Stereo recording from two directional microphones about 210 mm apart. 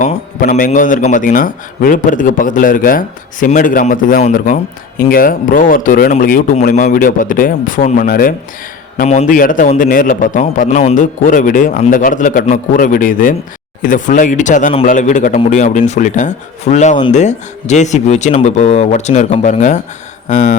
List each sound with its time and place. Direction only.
0.0 s a man's voice: 40° left (ahead or behind)